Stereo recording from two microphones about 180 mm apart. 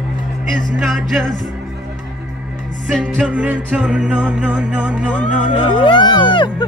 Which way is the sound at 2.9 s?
5° right (ahead or behind).